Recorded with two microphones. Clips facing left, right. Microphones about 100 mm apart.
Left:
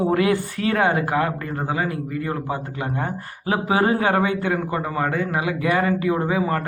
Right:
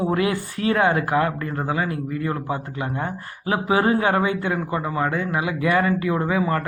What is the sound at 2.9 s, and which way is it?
A man's voice, 35° left (ahead or behind).